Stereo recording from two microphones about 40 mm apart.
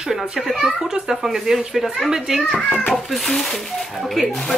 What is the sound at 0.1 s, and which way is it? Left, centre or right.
Speech, centre.